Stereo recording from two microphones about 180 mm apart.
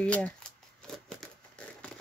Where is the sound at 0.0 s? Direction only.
5° left (ahead or behind).